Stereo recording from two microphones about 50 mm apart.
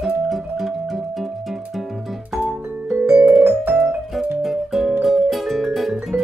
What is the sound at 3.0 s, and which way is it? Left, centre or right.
Vibraphone, right.